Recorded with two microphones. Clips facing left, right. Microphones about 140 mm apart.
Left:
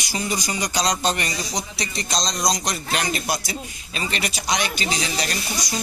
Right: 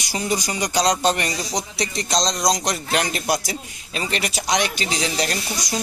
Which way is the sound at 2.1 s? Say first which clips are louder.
Right 3 dB; 20° right (ahead or behind).